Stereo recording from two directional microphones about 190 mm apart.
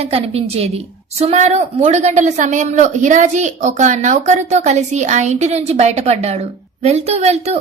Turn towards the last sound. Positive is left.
turn(degrees=-35)  # may be behind; listen again after turning